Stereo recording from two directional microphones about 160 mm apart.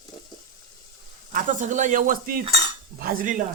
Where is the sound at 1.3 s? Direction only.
50° right (ahead or behind).